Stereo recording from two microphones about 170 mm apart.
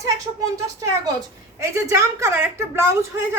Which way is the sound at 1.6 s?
15° right (ahead or behind).